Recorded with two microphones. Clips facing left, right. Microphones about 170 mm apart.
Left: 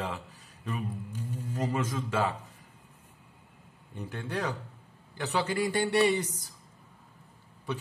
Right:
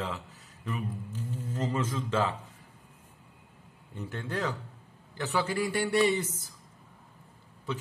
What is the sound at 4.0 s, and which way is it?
A man's voice, 15° left (ahead or behind).